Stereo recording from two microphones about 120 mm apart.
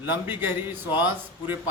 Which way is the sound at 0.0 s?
15° right (ahead or behind).